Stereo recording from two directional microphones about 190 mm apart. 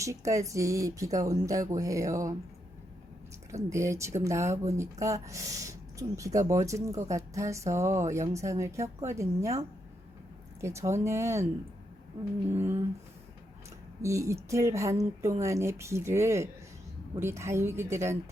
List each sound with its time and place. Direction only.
0.0 s speech: 15° right (ahead or behind)
3.5 s speech: 15° right (ahead or behind)
10.6 s speech: 15° right (ahead or behind)
12.5 s speech: 10° right (ahead or behind)
14.0 s speech: 15° right (ahead or behind)